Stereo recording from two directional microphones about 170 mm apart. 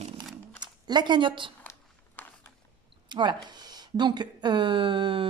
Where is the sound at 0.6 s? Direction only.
25° right (ahead or behind).